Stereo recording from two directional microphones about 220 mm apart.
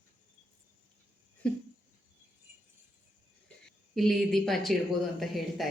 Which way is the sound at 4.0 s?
Centre (ahead or behind).